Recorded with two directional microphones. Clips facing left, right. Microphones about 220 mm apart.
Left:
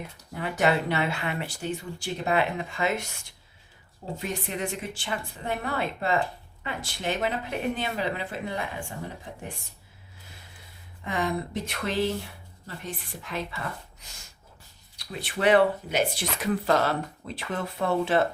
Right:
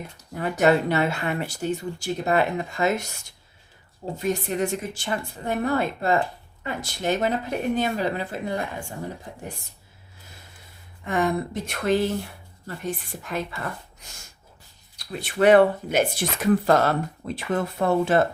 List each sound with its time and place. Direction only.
0.4 s speech: 45° right (ahead or behind)
4.3 s speech: 45° right (ahead or behind)
11.1 s speech: 50° right (ahead or behind)